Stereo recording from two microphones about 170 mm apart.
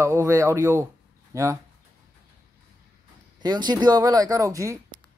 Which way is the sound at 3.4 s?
25° right (ahead or behind).